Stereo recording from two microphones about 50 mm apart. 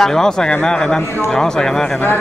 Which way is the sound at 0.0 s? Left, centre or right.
Centre.